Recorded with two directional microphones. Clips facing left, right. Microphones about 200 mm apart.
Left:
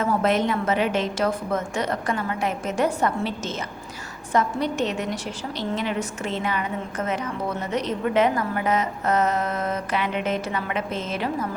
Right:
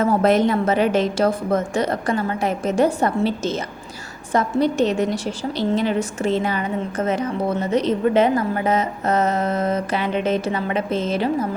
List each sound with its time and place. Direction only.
0.0 s a woman's voice: 40° right (ahead or behind)